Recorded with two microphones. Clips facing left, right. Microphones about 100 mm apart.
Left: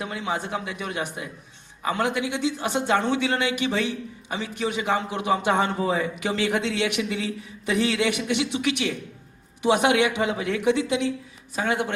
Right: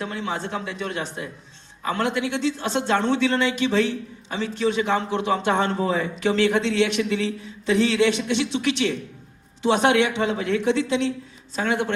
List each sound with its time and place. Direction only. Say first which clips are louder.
0.0 s speech: right 1 dB; 15° left (ahead or behind)